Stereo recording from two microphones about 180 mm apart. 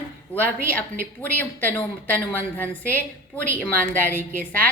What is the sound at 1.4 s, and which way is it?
A woman's voice, 10° left (ahead or behind).